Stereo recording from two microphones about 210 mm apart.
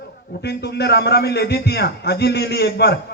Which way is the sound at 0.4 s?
50° left (ahead or behind).